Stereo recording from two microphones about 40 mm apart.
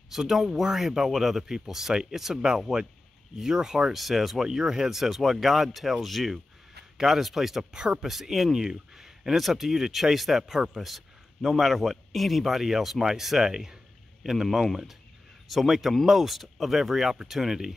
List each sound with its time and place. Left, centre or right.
0.1 s speech: centre
3.9 s speech: centre
7.7 s speech: right
8.0 s speech: centre